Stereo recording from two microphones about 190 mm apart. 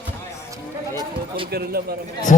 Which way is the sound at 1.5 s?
55° right (ahead or behind).